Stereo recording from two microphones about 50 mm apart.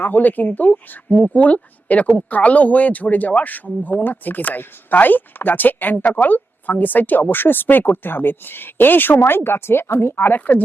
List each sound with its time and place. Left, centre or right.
0.0 s speech: left
10.3 s speech: left